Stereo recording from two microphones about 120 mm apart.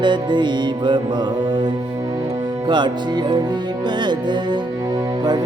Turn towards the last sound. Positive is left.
turn(degrees=-40)  # may be behind; listen again after turning